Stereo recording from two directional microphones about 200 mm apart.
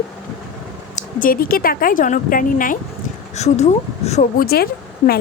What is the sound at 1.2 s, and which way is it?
A woman's voice, 45° left (ahead or behind).